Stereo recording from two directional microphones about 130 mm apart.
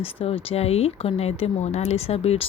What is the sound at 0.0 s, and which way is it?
A woman's voice, 45° left (ahead or behind).